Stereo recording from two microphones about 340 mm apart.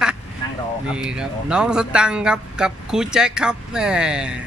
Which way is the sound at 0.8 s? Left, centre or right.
Centre.